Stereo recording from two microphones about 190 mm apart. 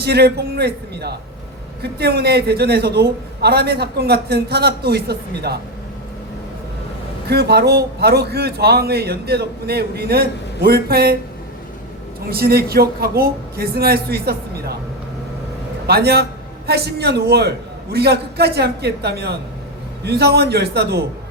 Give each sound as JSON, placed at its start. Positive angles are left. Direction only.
{"t": 0.0, "sound": "a man's voice", "side_deg": -60}
{"t": 7.3, "sound": "a man's voice", "side_deg": -60}
{"t": 12.2, "sound": "a man's voice", "side_deg": -55}
{"t": 15.9, "sound": "a man's voice", "side_deg": -55}